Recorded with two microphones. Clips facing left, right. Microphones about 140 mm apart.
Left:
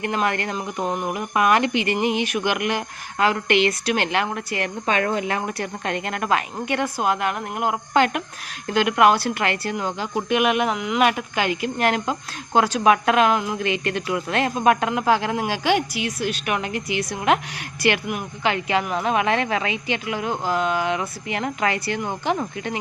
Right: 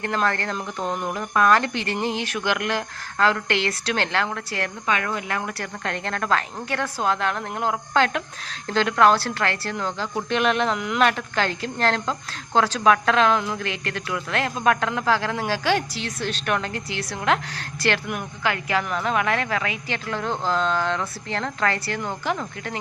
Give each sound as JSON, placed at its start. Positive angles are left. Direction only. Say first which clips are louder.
{"t": 0.0, "sound": "a woman's voice", "louder": "left 1 dB", "side_deg": 15}
{"t": 4.9, "sound": "a woman's voice", "louder": "left 4 dB", "side_deg": 30}